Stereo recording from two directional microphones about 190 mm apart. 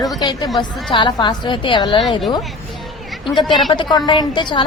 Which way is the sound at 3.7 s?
25° left (ahead or behind).